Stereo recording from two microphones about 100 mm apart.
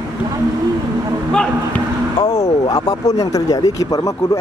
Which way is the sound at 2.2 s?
40° left (ahead or behind).